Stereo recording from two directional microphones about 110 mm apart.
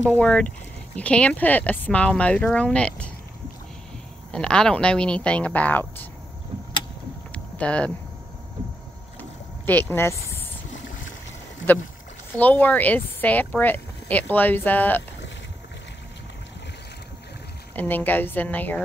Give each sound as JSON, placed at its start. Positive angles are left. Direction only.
{"t": 0.1, "sound": "speech", "side_deg": 10}
{"t": 4.3, "sound": "speech", "side_deg": 10}
{"t": 7.3, "sound": "a sound", "side_deg": 10}
{"t": 9.7, "sound": "speech", "side_deg": 15}
{"t": 12.4, "sound": "speech", "side_deg": 15}
{"t": 17.7, "sound": "speech", "side_deg": 15}